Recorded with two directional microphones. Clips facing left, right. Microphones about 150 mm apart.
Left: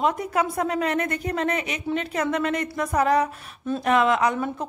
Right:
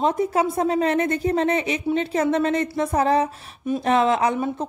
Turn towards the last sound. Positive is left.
turn(degrees=-30)  # may be behind; listen again after turning